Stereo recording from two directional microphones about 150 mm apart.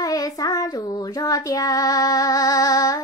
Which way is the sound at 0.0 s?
25° left (ahead or behind).